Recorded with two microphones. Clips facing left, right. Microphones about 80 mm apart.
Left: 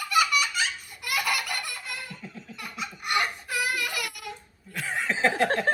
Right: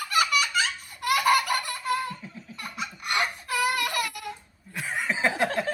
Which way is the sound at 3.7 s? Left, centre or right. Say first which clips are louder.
Right 3 dB; right.